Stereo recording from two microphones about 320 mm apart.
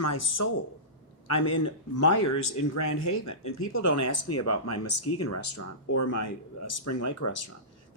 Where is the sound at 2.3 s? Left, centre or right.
Left.